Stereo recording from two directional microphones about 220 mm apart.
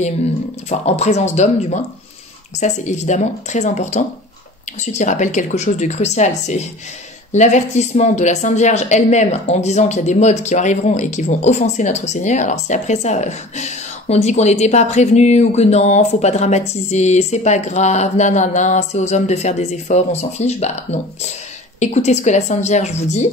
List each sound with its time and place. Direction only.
0.7 s speech: 30° left (ahead or behind)
21.7 s speech: 30° left (ahead or behind)